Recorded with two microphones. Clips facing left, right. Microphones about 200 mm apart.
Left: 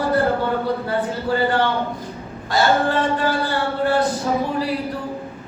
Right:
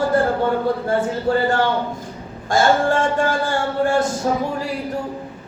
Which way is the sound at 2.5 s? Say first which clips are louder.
Right 2 dB; 45° right (ahead or behind).